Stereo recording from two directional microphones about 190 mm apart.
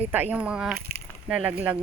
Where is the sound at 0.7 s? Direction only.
55° right (ahead or behind).